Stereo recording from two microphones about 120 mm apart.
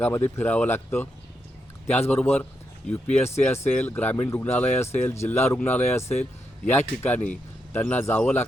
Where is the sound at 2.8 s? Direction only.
75° left (ahead or behind).